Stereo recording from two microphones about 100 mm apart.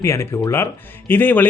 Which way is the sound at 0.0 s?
30° left (ahead or behind).